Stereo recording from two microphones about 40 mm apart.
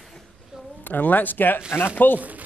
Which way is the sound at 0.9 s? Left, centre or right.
Left.